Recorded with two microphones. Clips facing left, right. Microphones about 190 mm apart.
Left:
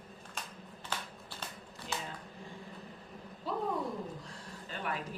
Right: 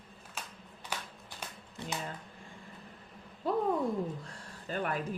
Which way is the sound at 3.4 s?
50° right (ahead or behind).